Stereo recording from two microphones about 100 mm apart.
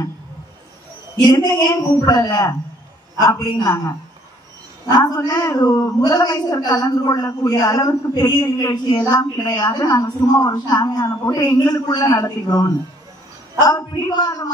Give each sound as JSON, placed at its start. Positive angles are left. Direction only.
{"t": 1.1, "sound": "a woman's voice", "side_deg": 40}